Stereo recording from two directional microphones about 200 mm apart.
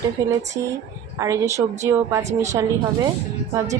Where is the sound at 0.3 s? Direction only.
15° right (ahead or behind).